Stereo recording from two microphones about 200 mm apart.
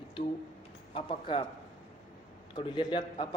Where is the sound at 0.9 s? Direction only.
25° left (ahead or behind).